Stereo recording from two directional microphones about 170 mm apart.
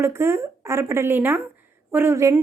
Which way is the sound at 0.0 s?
15° right (ahead or behind).